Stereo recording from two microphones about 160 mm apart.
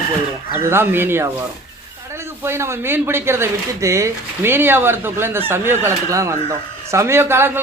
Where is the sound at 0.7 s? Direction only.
15° right (ahead or behind).